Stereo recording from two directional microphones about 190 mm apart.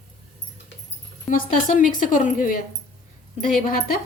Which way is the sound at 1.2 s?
40° left (ahead or behind).